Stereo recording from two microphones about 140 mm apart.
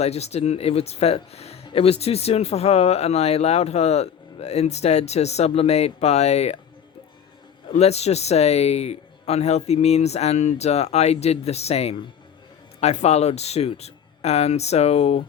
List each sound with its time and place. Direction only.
0.0 s speech: 50° left (ahead or behind)
7.7 s speech: 50° left (ahead or behind)